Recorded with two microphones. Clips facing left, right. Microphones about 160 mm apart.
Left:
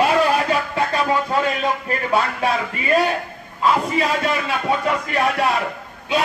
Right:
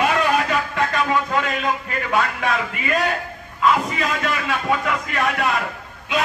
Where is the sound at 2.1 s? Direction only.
30° left (ahead or behind).